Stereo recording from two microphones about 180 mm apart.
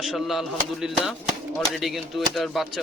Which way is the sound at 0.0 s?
Centre (ahead or behind).